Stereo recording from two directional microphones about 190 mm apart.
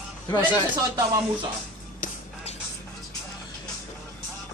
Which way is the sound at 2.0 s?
35° left (ahead or behind).